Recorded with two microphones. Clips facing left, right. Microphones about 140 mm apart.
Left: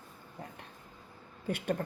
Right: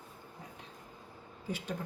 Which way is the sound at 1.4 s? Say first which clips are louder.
Left 6 dB; 60° left (ahead or behind).